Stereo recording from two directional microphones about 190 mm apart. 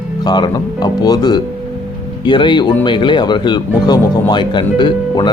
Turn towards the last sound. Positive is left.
turn(degrees=25)  # may be behind; listen again after turning